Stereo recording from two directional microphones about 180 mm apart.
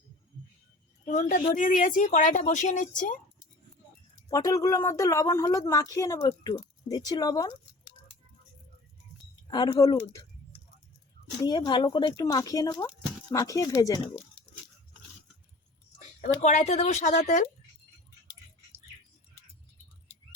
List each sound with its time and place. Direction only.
1.0 s a woman's voice: 45° left (ahead or behind)
4.3 s speech: 20° left (ahead or behind)
9.5 s speech: 25° left (ahead or behind)
11.4 s speech: 25° left (ahead or behind)
16.2 s speech: 40° left (ahead or behind)